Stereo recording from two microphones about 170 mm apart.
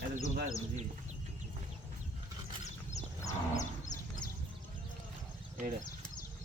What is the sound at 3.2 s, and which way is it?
Livestock, 20° left (ahead or behind).